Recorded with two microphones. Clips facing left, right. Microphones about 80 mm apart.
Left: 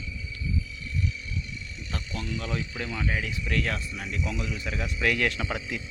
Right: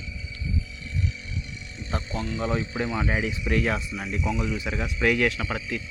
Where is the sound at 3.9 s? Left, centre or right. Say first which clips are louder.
Right 4 dB; centre.